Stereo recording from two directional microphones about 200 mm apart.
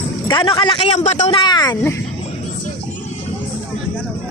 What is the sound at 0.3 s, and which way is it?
A man's voice, 25° left (ahead or behind).